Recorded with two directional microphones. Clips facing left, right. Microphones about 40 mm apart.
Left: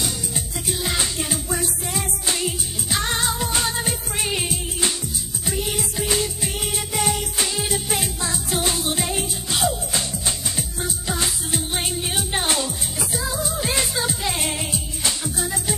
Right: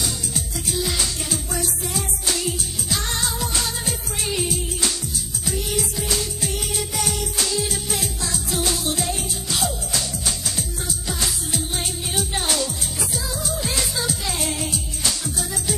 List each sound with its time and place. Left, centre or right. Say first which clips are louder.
0.0 s music: even; left